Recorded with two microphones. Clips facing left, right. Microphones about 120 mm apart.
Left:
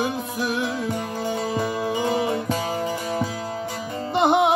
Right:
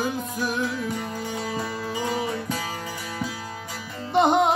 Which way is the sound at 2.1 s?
40° left (ahead or behind).